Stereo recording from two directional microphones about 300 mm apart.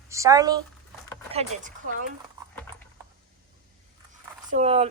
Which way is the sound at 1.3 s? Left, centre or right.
Right.